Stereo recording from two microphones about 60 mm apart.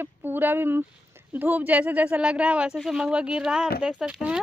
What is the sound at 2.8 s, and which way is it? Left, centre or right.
Speech, centre.